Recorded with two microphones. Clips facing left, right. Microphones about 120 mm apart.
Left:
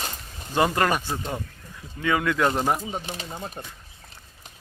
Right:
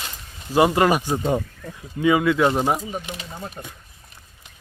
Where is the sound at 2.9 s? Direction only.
35° left (ahead or behind).